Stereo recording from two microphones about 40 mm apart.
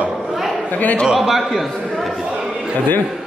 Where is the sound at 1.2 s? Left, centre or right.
Centre.